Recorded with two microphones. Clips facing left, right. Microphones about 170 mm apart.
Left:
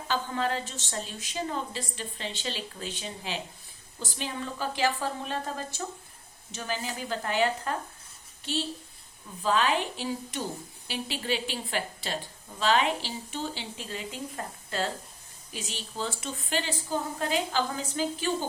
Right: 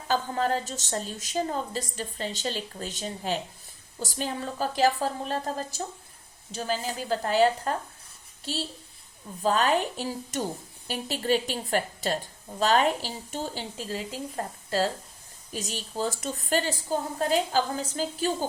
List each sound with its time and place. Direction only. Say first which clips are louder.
0.1 s a woman's voice: right 3 dB; 40° right (ahead or behind)